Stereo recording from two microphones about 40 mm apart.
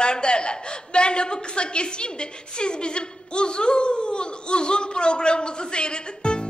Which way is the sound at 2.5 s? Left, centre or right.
Left.